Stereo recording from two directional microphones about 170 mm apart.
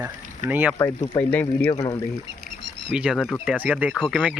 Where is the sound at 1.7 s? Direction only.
25° left (ahead or behind).